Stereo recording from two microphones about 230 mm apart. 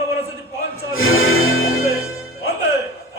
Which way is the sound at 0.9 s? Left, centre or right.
Left.